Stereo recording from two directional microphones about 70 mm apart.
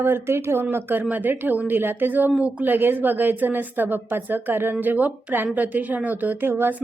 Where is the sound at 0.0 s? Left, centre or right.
Right.